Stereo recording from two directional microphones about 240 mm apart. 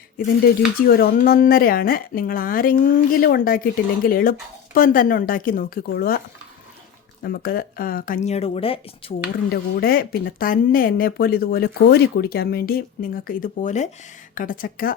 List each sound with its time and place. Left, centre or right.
0.2 s speech: left
9.5 s speech: left